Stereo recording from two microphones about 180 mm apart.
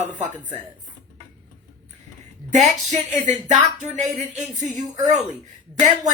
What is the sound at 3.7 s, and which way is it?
Music, 40° right (ahead or behind).